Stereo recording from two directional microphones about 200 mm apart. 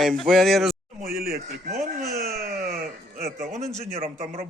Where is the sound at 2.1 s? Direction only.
50° right (ahead or behind).